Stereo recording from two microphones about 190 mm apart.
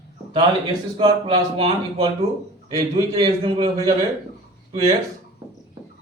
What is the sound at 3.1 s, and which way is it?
Speech, 30° right (ahead or behind).